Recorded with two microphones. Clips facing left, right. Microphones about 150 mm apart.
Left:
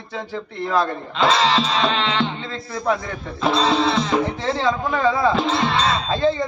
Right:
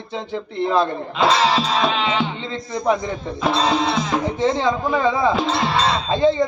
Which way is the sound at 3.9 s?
15° right (ahead or behind).